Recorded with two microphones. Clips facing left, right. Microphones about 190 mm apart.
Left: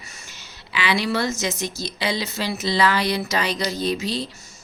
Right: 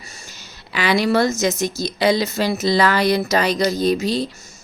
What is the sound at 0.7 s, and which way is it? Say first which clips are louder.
A woman's voice: right 5 dB; 45° right (ahead or behind).